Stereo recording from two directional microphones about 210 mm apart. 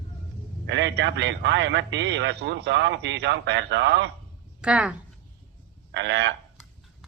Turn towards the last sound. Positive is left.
turn(degrees=-55)  # may be behind; listen again after turning